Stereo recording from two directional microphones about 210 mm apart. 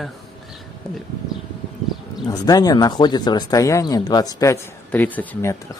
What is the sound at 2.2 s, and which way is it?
Speech, 20° left (ahead or behind).